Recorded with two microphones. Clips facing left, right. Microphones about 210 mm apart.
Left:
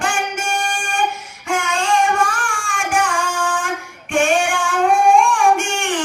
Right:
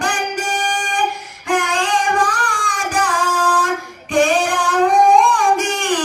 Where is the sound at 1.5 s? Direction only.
35° right (ahead or behind).